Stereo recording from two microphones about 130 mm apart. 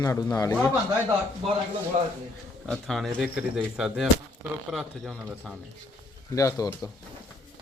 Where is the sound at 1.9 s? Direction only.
70° right (ahead or behind).